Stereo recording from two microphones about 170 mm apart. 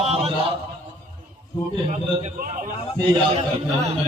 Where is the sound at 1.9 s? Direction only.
45° right (ahead or behind).